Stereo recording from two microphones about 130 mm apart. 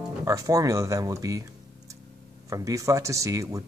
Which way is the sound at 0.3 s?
25° right (ahead or behind).